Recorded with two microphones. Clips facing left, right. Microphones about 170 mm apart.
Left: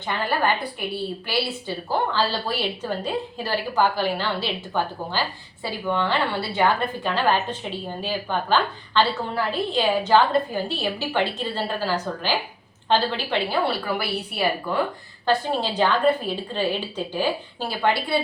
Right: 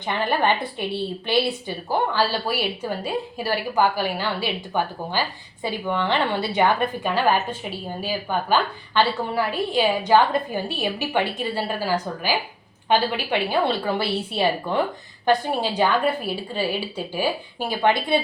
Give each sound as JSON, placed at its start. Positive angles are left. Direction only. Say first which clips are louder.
{"t": 0.0, "sound": "a woman's voice", "louder": "right 2 dB", "side_deg": -20}
{"t": 15.3, "sound": "a woman's voice", "louder": "right 2 dB", "side_deg": -10}